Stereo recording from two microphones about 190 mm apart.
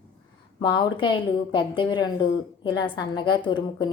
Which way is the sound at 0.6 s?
25° left (ahead or behind).